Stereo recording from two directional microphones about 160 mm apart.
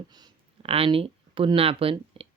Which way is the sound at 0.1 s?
25° right (ahead or behind).